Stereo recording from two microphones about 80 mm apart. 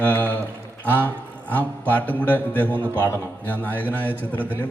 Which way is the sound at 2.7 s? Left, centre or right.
Right.